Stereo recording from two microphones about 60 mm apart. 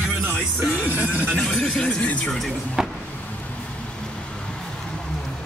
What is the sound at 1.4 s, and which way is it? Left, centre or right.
Speech, centre.